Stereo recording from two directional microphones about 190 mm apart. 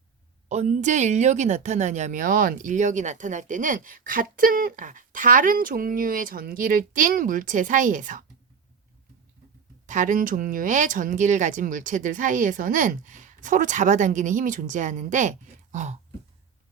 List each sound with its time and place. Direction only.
0.4 s a woman's voice: 35° right (ahead or behind)
9.8 s a woman's voice: 40° right (ahead or behind)